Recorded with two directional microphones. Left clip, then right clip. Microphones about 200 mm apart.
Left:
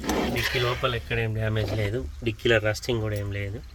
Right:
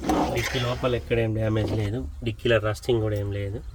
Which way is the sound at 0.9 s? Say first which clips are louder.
Right 4 dB; 15° left (ahead or behind).